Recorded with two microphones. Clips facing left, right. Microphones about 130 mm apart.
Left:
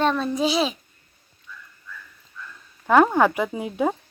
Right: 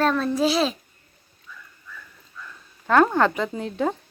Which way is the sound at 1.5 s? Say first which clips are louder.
Left 1 dB; 55° right (ahead or behind).